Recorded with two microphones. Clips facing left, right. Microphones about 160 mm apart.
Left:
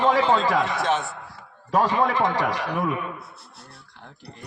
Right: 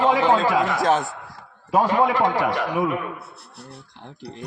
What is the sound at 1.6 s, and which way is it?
A man's voice, 5° right (ahead or behind).